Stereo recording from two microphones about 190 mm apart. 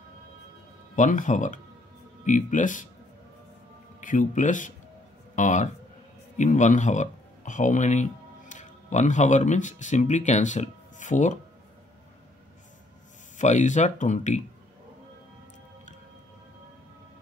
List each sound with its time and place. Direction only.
0.9 s speech: 40° left (ahead or behind)
4.0 s speech: 45° left (ahead or behind)
13.4 s speech: 40° left (ahead or behind)